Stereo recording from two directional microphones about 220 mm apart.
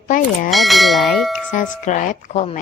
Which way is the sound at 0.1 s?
35° left (ahead or behind).